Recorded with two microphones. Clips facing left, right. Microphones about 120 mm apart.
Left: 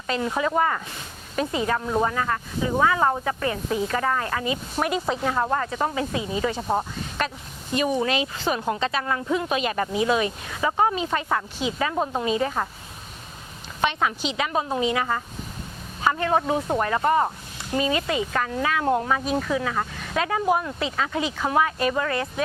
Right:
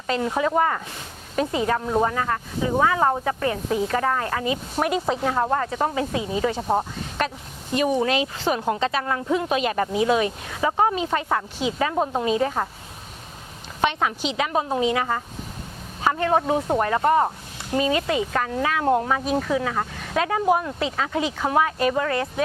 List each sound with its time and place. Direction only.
0.1 s speech: 45° right (ahead or behind)
6.6 s speech: 25° right (ahead or behind)
6.9 s a sound: 45° right (ahead or behind)
7.7 s speech: 55° right (ahead or behind)
10.9 s speech: 55° right (ahead or behind)
13.8 s speech: 55° right (ahead or behind)
16.0 s speech: 45° right (ahead or behind)